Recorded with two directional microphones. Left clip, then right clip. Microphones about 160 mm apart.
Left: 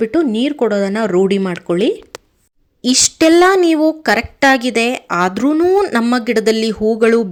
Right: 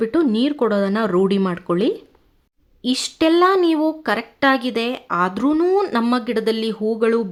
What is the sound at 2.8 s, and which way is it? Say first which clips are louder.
A woman's voice: left 7 dB; 20° left (ahead or behind).